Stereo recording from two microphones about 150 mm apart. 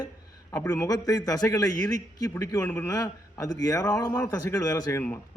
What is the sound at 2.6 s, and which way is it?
Speech, 10° left (ahead or behind).